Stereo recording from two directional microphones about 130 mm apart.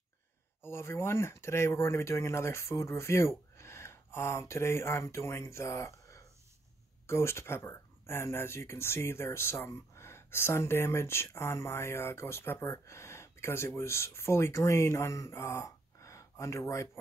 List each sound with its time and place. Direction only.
0.6 s speech: 20° left (ahead or behind)